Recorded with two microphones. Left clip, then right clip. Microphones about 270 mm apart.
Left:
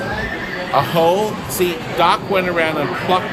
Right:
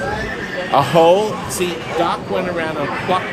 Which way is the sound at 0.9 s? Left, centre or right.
Centre.